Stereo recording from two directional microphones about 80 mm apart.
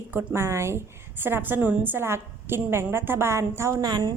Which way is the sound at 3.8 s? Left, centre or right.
Right.